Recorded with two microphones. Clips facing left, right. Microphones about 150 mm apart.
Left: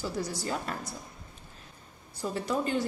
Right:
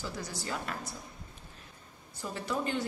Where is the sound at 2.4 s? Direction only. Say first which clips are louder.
Left 3 dB; 40° left (ahead or behind).